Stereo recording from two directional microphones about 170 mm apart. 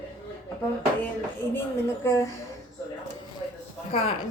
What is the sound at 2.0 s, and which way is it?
Speech, 15° left (ahead or behind).